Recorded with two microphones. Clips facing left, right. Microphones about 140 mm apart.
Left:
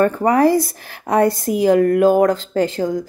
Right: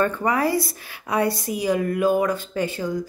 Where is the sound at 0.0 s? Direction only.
40° left (ahead or behind).